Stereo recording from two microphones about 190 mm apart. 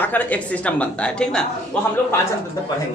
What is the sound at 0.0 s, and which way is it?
A woman's voice, 10° left (ahead or behind).